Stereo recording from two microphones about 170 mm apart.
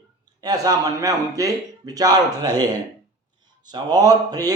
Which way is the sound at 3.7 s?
25° right (ahead or behind).